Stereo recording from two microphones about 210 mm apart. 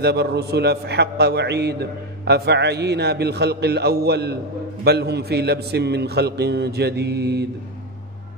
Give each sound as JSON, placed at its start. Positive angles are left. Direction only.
{"t": 0.0, "sound": "a man's voice", "side_deg": -50}